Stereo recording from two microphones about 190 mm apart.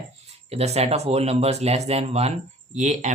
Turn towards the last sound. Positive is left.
turn(degrees=-35)  # may be behind; listen again after turning